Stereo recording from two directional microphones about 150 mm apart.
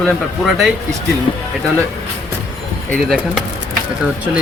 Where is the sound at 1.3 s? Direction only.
45° left (ahead or behind).